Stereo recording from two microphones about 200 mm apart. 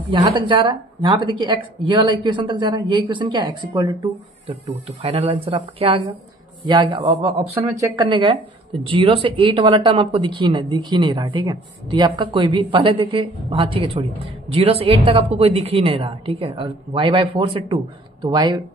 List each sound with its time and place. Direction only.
0.1 s speech: 25° right (ahead or behind)
7.5 s speech: 15° right (ahead or behind)